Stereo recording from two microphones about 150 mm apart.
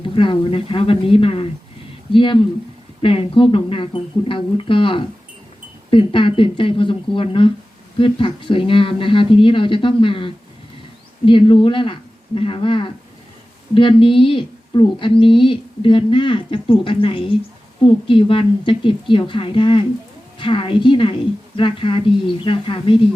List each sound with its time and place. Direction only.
0.1 s a woman's voice: 35° left (ahead or behind)